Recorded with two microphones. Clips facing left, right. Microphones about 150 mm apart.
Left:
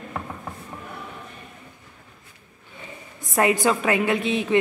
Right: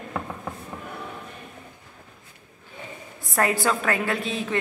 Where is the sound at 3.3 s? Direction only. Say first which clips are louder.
Left 3 dB; 20° left (ahead or behind).